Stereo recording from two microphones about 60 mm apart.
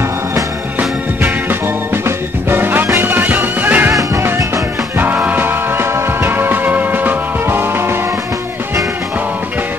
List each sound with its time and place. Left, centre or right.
0.7 s music: right
4.9 s music: right